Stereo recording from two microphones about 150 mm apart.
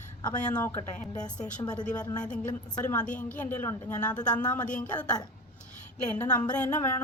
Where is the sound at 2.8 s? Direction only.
10° left (ahead or behind).